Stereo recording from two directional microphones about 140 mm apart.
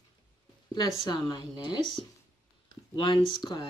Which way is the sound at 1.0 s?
30° left (ahead or behind).